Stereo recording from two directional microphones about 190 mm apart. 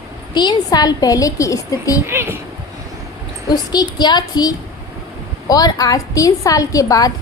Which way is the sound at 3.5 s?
20° left (ahead or behind).